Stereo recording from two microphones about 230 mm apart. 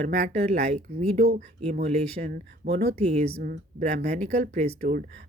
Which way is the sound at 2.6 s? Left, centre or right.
Right.